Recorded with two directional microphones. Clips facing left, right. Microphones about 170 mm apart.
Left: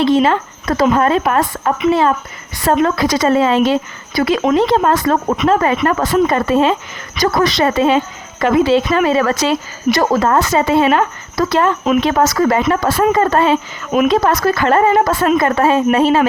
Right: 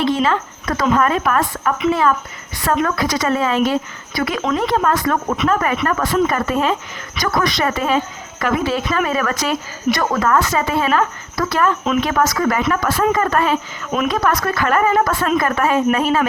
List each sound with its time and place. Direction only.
0.0 s speech: 30° left (ahead or behind)